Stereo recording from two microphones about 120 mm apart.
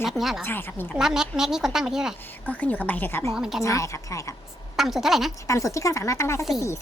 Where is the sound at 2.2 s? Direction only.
15° left (ahead or behind).